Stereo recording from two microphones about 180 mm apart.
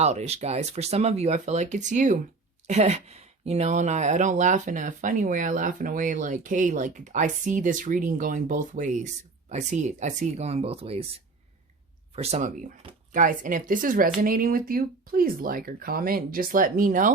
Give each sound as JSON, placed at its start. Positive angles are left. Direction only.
{"t": 0.0, "sound": "speech", "side_deg": -40}
{"t": 12.1, "sound": "speech", "side_deg": -35}